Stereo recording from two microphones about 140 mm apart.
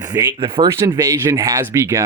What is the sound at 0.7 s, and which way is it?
Speech, 20° right (ahead or behind).